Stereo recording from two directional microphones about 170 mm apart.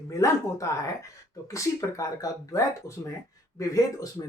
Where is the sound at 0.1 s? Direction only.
20° left (ahead or behind).